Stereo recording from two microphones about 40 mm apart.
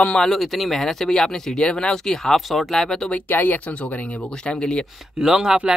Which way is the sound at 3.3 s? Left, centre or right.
Left.